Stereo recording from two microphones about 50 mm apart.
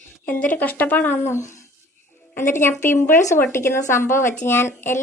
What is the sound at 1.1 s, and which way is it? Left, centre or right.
Speech, left.